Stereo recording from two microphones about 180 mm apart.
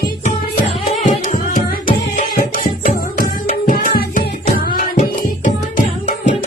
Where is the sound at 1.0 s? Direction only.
45° left (ahead or behind).